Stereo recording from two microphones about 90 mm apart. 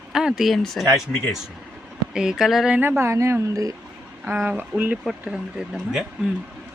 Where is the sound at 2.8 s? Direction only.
25° right (ahead or behind).